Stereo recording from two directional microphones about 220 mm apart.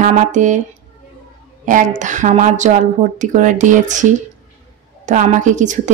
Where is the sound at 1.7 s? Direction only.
35° right (ahead or behind).